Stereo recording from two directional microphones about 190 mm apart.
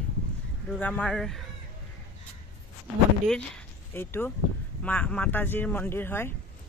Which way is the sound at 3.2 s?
5° left (ahead or behind).